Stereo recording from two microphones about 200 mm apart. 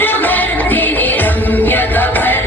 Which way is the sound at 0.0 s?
10° left (ahead or behind).